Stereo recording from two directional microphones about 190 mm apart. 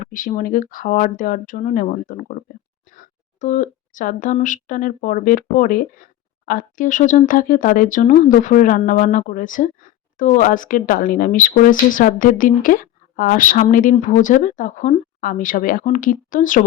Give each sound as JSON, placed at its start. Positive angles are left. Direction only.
{"t": 0.0, "sound": "speech", "side_deg": 45}